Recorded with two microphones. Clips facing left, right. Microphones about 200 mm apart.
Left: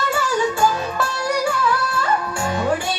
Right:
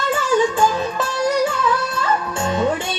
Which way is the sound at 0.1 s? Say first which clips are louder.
Right 6 dB; 20° right (ahead or behind).